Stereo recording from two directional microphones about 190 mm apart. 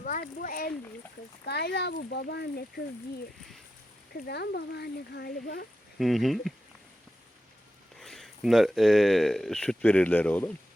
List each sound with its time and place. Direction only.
0.0 s speech: 50° left (ahead or behind)
1.5 s speech: 60° left (ahead or behind)
4.1 s speech: 60° left (ahead or behind)
6.0 s speech: centre (ahead or behind)
7.9 s speech: centre (ahead or behind)